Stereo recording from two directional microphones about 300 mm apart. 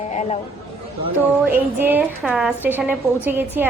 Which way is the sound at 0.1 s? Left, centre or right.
Left.